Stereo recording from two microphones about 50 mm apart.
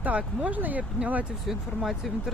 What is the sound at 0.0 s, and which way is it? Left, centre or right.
Speech, right.